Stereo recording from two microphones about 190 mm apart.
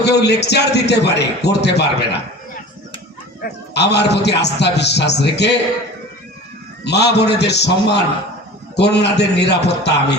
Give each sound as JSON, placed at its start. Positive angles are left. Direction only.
{"t": 0.0, "sound": "a man's voice", "side_deg": 60}
{"t": 3.4, "sound": "a man's voice", "side_deg": 60}
{"t": 6.8, "sound": "a man's voice", "side_deg": 60}